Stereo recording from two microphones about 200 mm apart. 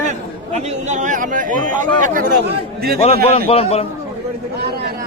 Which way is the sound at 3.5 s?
30° left (ahead or behind).